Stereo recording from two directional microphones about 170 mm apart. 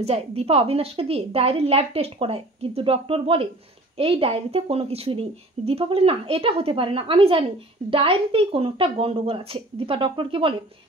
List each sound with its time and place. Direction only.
0.0 s a woman's voice: 35° right (ahead or behind)